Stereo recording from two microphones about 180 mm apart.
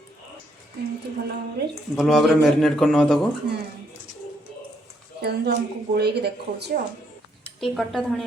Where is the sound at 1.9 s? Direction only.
Centre (ahead or behind).